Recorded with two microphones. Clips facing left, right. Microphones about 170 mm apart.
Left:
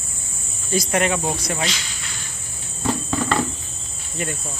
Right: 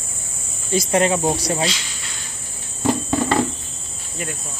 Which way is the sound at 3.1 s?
20° right (ahead or behind).